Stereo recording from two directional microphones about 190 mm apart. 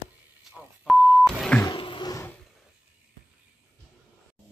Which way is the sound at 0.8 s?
Centre (ahead or behind).